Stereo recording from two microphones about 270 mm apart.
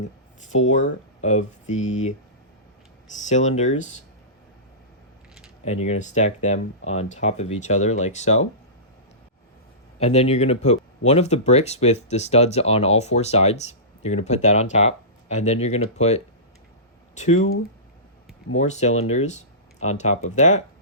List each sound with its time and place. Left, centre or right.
0.5 s speech: left
3.2 s speech: left
5.8 s speech: left
10.0 s speech: left
18.5 s speech: left